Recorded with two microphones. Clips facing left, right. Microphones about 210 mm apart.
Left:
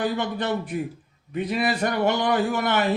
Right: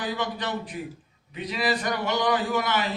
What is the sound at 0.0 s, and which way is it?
A man's voice, 55° left (ahead or behind).